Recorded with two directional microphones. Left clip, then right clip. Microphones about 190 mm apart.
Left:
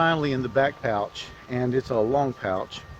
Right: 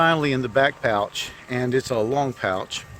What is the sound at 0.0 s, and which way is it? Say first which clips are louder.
Speech: right 3 dB; 30° right (ahead or behind).